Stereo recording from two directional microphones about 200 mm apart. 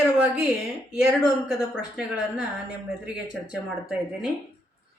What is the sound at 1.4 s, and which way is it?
Speech, 5° right (ahead or behind).